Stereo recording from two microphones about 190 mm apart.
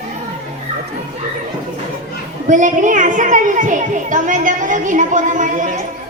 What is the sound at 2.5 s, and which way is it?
A child's voice, 45° right (ahead or behind).